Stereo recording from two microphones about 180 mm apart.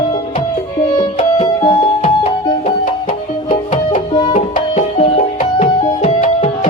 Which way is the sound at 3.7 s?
40° left (ahead or behind).